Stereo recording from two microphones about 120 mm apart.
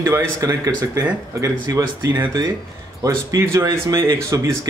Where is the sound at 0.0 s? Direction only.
25° right (ahead or behind).